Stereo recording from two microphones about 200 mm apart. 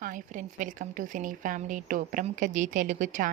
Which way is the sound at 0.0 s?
40° right (ahead or behind).